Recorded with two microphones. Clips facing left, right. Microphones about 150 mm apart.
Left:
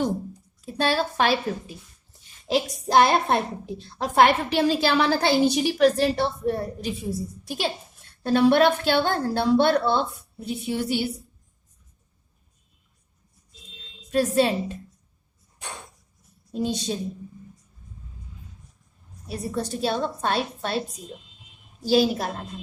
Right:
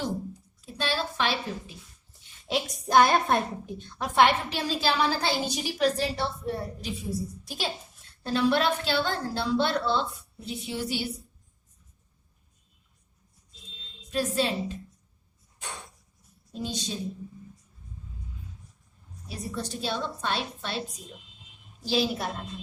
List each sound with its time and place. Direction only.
0.6 s a woman's voice: 50° left (ahead or behind)
2.9 s a woman's voice: 25° left (ahead or behind); by 11.0 s 50° left (ahead or behind)
14.1 s a woman's voice: 55° left (ahead or behind)
16.5 s a woman's voice: 55° left (ahead or behind)
19.3 s a woman's voice: 55° left (ahead or behind)
21.9 s a woman's voice: 40° left (ahead or behind)